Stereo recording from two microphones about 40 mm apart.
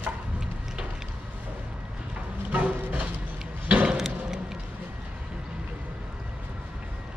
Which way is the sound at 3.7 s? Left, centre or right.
Right.